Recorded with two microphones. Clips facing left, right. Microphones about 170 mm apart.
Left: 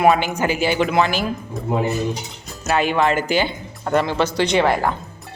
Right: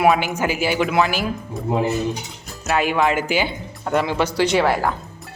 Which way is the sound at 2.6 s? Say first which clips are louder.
Left 1 dB; 5° right (ahead or behind).